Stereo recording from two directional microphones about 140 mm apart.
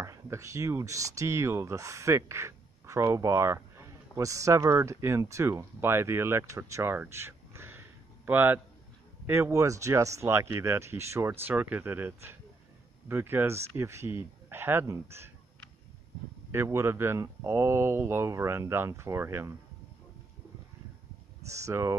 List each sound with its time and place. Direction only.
0.0 s speech: 20° right (ahead or behind)
16.5 s speech: 20° right (ahead or behind)
21.5 s speech: 20° right (ahead or behind)